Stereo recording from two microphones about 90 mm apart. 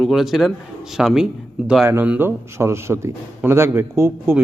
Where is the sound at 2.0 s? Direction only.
25° right (ahead or behind).